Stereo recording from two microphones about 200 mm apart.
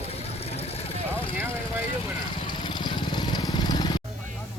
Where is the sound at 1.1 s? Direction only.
10° right (ahead or behind).